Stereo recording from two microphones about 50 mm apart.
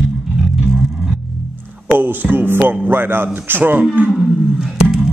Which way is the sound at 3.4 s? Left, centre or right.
Right.